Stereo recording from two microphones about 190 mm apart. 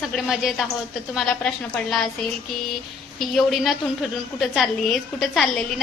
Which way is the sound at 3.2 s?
Centre (ahead or behind).